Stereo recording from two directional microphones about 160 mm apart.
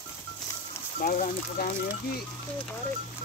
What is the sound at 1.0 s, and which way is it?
Speech, 55° left (ahead or behind).